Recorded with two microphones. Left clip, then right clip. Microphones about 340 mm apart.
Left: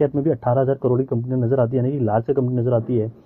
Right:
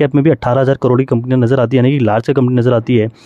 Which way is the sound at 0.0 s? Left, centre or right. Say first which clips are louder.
Right 7 dB; right.